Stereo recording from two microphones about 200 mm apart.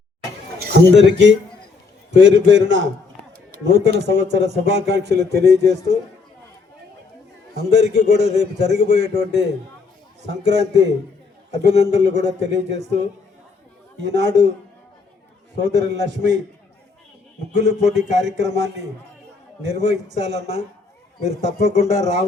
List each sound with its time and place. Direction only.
0.9 s a man's voice: 60° right (ahead or behind)
7.7 s a man's voice: 60° right (ahead or behind)
14.0 s a man's voice: 60° right (ahead or behind)
15.6 s a man's voice: 60° right (ahead or behind)
17.5 s a man's voice: 60° right (ahead or behind)